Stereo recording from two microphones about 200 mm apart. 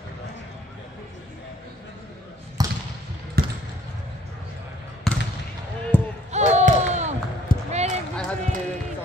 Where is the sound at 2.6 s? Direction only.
20° right (ahead or behind).